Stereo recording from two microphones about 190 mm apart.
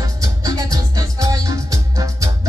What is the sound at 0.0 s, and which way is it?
Music, 20° right (ahead or behind).